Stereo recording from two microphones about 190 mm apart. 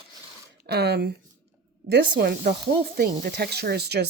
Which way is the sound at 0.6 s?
60° right (ahead or behind).